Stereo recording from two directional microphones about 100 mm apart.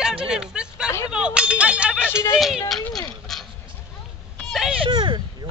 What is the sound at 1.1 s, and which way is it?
A man's voice, 10° right (ahead or behind).